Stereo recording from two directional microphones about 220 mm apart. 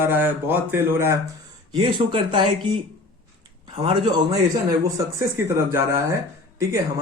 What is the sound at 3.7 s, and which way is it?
Speech, 25° right (ahead or behind).